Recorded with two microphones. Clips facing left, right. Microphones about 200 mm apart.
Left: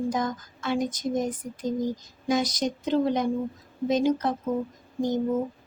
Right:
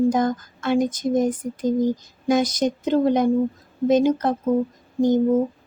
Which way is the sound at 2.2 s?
55° right (ahead or behind).